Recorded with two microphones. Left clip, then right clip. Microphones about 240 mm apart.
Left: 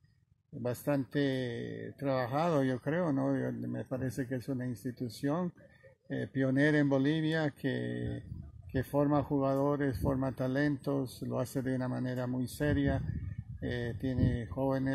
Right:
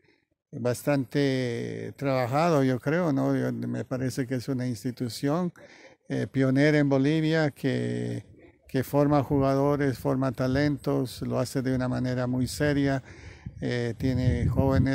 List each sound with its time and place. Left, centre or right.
0.6 s speech: right